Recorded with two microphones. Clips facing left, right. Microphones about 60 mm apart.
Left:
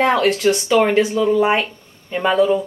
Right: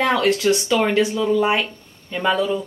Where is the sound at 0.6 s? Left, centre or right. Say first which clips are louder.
Left 3 dB; centre.